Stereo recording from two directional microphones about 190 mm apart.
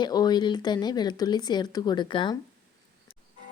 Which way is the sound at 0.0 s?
20° left (ahead or behind).